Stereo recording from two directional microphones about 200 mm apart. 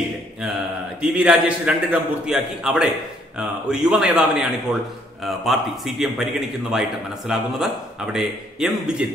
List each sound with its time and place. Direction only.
1.1 s a man's voice: 5° right (ahead or behind)